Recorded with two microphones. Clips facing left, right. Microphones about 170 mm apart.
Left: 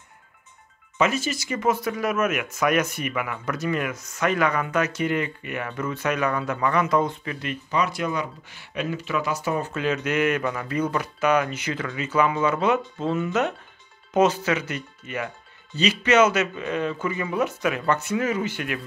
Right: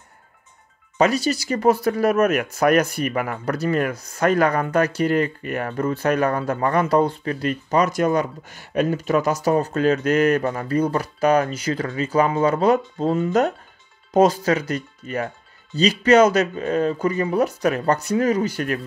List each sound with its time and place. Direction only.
0.9 s speech: 35° right (ahead or behind)
6.2 s speech: 45° right (ahead or behind)